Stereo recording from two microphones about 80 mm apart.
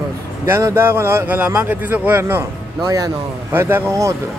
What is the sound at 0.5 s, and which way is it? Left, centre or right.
Speech, right.